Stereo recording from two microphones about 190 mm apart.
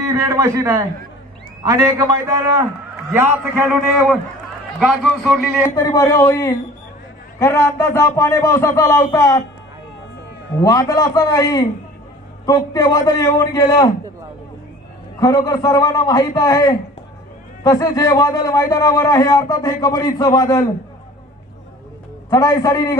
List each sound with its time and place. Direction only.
0.1 s a man's voice: 15° right (ahead or behind)
5.8 s a man's voice: 20° left (ahead or behind)
10.5 s a man's voice: 15° left (ahead or behind)
15.1 s a man's voice: 20° left (ahead or behind)
22.3 s a man's voice: 20° left (ahead or behind)